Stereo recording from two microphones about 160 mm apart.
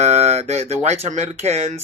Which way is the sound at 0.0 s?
45° right (ahead or behind).